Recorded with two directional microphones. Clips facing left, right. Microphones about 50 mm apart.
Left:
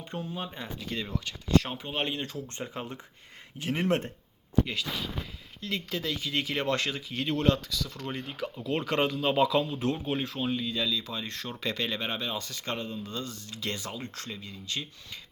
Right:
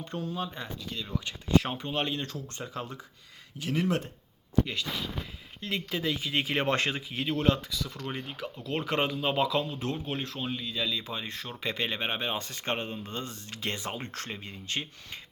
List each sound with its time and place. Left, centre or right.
0.0 s speech: centre
1.2 s speech: right
1.8 s speech: centre; by 3.8 s left
3.8 s speech: left
4.6 s speech: centre
5.7 s speech: centre
7.1 s speech: centre
7.7 s speech: centre
8.1 s speech: centre
10.8 s speech: right